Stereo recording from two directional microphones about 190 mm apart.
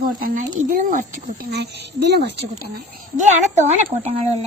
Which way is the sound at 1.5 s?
60° right (ahead or behind).